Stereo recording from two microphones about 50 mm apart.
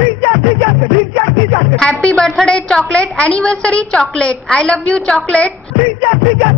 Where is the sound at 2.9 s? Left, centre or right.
Centre.